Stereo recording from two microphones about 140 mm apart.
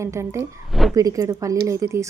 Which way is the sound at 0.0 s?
20° right (ahead or behind).